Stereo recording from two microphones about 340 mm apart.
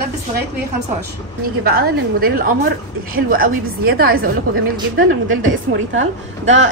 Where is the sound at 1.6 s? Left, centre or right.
Right.